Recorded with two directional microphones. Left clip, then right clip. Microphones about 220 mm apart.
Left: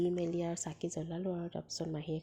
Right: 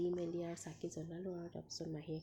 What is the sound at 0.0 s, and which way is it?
Speech, 25° left (ahead or behind).